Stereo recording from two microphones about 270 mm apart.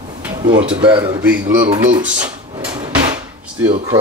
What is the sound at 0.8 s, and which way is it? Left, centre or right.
Speech, centre.